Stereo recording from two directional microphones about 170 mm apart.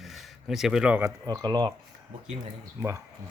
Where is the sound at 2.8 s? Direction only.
15° right (ahead or behind).